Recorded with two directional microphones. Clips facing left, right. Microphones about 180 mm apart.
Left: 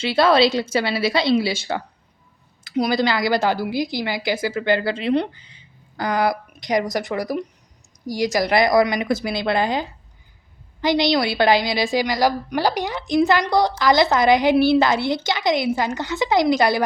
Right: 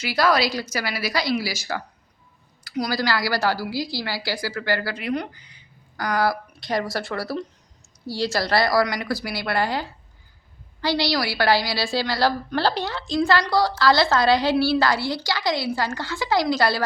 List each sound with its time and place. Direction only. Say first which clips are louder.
0.0 s a woman's voice: left 5 dB; 25° left (ahead or behind)